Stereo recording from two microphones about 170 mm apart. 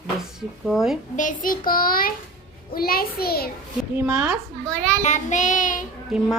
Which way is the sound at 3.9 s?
5° right (ahead or behind).